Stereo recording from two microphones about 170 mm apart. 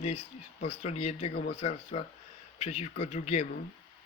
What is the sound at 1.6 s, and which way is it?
Speech, 40° left (ahead or behind).